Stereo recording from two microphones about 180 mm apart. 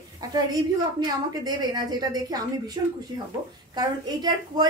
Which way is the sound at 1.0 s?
20° right (ahead or behind).